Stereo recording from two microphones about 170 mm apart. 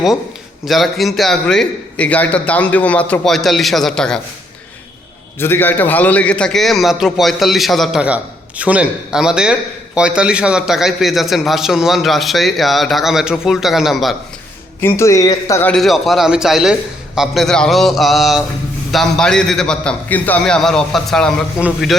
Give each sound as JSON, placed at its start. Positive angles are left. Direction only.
{"t": 0.6, "sound": "a man's voice", "side_deg": 0}
{"t": 5.4, "sound": "a man's voice", "side_deg": 10}
{"t": 14.8, "sound": "a man's voice", "side_deg": 15}
{"t": 15.7, "sound": "a man's voice", "side_deg": 0}